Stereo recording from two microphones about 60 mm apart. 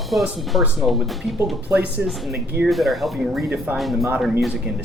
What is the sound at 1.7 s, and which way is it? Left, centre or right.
Speech, centre.